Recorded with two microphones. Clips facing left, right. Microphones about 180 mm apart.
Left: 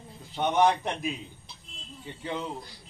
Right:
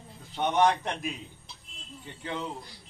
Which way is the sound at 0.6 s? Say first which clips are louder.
Left 1 dB; 15° left (ahead or behind).